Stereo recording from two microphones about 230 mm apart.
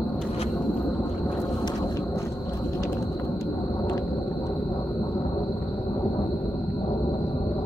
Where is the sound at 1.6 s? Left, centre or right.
Centre.